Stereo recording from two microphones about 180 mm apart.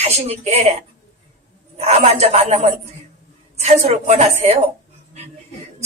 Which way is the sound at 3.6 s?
35° right (ahead or behind).